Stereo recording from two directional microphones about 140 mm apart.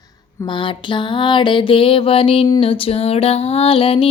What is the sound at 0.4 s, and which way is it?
Music, 35° left (ahead or behind).